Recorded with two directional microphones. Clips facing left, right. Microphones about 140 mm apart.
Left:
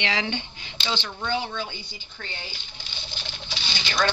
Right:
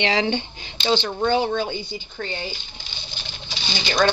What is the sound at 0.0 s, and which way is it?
Speech, 30° right (ahead or behind).